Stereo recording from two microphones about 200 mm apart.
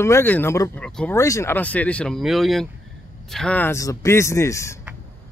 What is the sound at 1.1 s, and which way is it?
Speech, 15° left (ahead or behind).